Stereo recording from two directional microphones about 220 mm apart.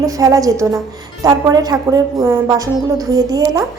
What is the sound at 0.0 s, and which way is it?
A woman's voice, 15° right (ahead or behind).